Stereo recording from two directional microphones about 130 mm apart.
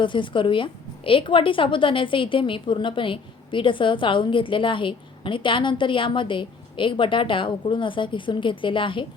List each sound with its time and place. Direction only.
0.0 s a woman's voice: 40° left (ahead or behind)